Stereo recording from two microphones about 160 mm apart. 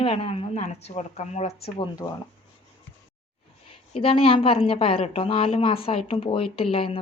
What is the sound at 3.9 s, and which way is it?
A woman's voice, 35° left (ahead or behind).